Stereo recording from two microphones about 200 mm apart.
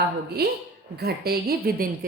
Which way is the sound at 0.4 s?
50° right (ahead or behind).